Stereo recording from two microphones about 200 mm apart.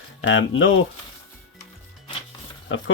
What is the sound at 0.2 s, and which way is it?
Speech, 75° left (ahead or behind).